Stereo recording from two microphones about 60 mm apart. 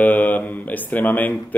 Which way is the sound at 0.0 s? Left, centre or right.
Left.